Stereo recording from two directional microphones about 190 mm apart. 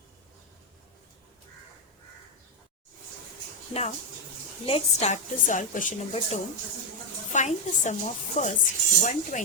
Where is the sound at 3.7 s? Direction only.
35° left (ahead or behind).